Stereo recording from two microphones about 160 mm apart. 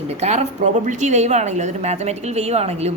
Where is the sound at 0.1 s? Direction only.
45° right (ahead or behind).